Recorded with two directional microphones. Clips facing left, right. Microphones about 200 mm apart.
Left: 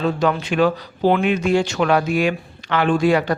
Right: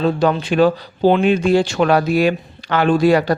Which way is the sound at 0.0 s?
35° right (ahead or behind).